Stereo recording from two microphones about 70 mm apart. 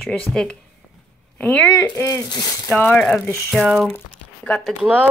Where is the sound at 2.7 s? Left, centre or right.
Left.